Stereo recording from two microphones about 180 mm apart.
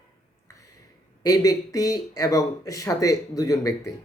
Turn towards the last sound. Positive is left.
turn(degrees=20)  # may be behind; listen again after turning